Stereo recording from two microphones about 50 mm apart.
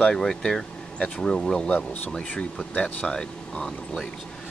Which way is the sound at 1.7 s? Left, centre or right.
Left.